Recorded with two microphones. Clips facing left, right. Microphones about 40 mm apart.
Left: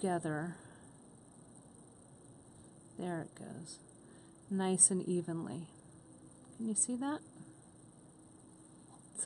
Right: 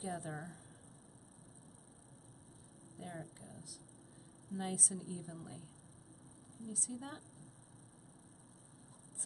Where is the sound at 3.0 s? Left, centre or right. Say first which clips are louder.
Left 8 dB; left.